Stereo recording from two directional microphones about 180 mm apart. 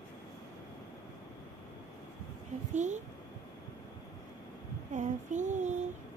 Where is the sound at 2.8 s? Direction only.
40° right (ahead or behind).